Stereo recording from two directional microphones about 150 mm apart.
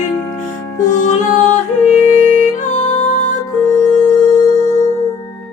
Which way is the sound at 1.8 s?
50° left (ahead or behind).